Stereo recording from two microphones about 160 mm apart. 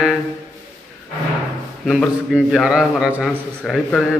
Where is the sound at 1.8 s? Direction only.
Centre (ahead or behind).